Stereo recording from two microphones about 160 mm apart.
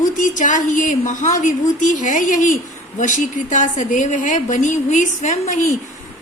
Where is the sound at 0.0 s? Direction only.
50° left (ahead or behind).